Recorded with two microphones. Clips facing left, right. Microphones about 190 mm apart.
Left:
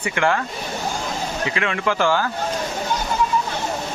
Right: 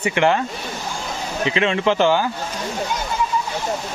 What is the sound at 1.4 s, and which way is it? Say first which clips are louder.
Speech: right 6 dB; 25° right (ahead or behind).